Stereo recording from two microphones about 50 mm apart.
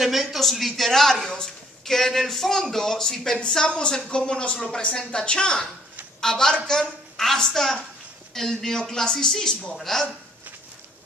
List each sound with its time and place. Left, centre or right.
0.0 s a man's voice: centre